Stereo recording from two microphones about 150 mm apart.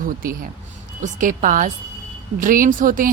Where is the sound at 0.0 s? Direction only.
70° right (ahead or behind).